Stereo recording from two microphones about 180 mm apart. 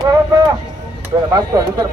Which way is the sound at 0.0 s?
25° right (ahead or behind).